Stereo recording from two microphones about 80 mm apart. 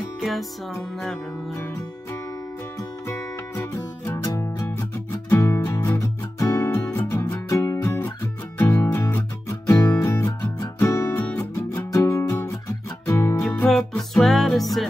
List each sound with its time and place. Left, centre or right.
0.2 s music: centre
3.1 s music: left
9.0 s music: left
13.4 s music: centre